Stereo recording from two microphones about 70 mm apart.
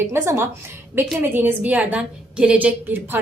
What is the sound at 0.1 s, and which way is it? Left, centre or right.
A woman's voice, right.